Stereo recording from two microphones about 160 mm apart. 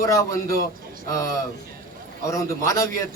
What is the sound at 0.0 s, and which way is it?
Speech, 20° left (ahead or behind).